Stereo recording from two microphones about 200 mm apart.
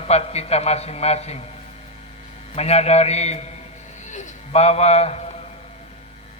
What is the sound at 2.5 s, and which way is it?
A man's voice, 30° left (ahead or behind).